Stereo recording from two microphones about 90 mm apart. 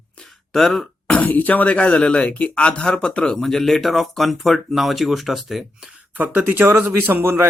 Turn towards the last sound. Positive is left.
turn(degrees=-25)  # may be behind; listen again after turning